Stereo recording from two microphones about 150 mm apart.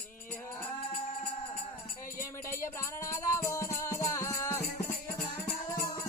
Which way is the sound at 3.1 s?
20° left (ahead or behind).